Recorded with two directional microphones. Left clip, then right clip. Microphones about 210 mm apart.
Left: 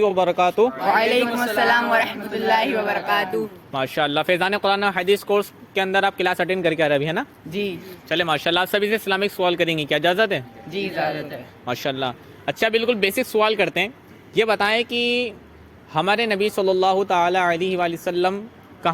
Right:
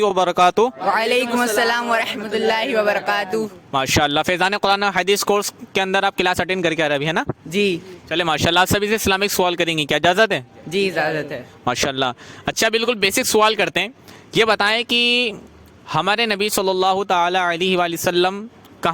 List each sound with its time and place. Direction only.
0.0 s speech: 50° right (ahead or behind)